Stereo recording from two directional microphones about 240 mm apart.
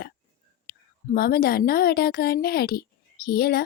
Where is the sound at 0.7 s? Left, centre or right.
Left.